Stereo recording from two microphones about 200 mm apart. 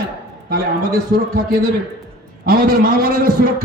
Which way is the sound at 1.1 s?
50° right (ahead or behind).